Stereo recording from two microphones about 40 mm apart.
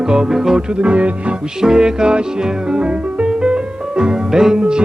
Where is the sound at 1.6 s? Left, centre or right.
Centre.